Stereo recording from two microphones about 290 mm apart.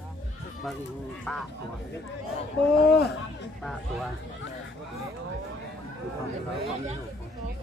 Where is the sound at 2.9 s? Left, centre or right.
Left.